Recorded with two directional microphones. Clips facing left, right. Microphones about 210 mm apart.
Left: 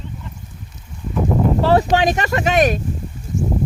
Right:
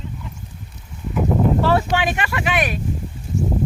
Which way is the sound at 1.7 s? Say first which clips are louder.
Left 4 dB; 40° left (ahead or behind).